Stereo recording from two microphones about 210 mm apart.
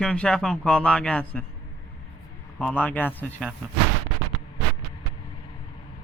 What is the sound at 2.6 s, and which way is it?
Speech, 10° left (ahead or behind).